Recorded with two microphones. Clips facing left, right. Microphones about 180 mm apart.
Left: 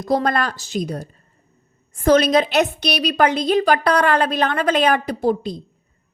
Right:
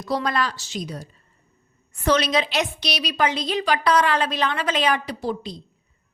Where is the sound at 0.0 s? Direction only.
50° left (ahead or behind).